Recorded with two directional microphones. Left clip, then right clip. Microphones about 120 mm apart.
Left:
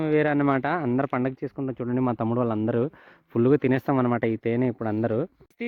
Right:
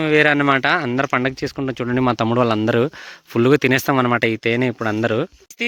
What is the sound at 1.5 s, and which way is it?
Speech, 35° right (ahead or behind).